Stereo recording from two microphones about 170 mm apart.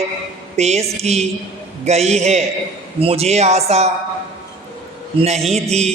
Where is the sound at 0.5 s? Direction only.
40° right (ahead or behind).